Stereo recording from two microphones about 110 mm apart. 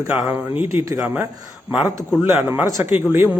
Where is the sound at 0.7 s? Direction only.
30° right (ahead or behind).